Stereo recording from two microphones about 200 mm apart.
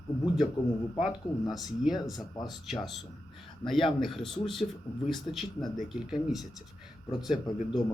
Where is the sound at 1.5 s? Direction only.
Centre (ahead or behind).